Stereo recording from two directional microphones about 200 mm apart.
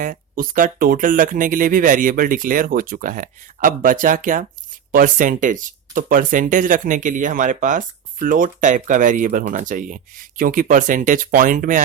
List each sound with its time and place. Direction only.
0.0 s speech: 40° right (ahead or behind)